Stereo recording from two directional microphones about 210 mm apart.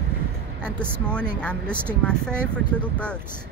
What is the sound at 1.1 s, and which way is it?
Speech, 5° left (ahead or behind).